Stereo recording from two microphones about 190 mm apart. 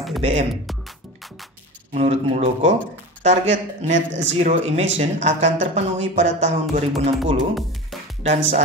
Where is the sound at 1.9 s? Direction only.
35° right (ahead or behind).